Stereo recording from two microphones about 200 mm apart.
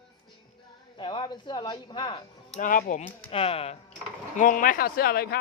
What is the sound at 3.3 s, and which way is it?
Speech, 30° left (ahead or behind).